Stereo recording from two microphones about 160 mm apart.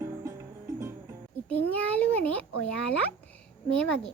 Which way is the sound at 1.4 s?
10° left (ahead or behind).